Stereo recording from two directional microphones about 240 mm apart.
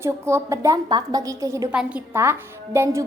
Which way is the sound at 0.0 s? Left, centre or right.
Centre.